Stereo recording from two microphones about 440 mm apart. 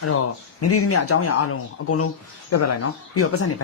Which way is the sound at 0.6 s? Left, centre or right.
Left.